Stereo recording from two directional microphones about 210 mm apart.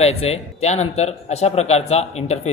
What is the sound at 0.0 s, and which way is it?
Speech, 30° left (ahead or behind).